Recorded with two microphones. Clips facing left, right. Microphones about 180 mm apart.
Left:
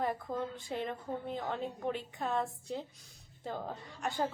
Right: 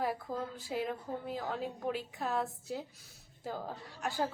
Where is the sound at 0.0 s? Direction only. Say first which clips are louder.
Left 1 dB; 5° right (ahead or behind).